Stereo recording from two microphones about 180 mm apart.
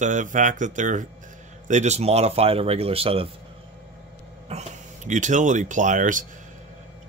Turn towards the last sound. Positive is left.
turn(degrees=-45)  # may be behind; listen again after turning